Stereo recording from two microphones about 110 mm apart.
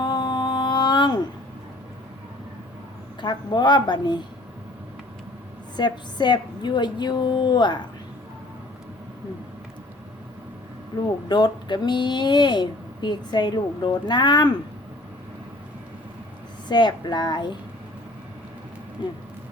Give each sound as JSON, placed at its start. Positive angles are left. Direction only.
{"t": 0.0, "sound": "a sound", "side_deg": 40}
{"t": 3.2, "sound": "a woman's voice", "side_deg": 40}
{"t": 5.7, "sound": "speech", "side_deg": 40}
{"t": 10.9, "sound": "speech", "side_deg": 45}
{"t": 16.6, "sound": "speech", "side_deg": 40}